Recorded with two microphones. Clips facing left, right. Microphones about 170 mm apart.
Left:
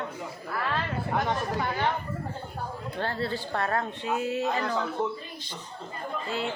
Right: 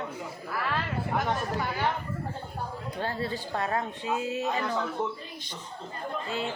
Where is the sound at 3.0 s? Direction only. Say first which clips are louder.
Left 2 dB; 15° right (ahead or behind).